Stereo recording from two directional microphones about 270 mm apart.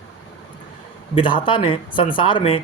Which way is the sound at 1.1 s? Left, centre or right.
Centre.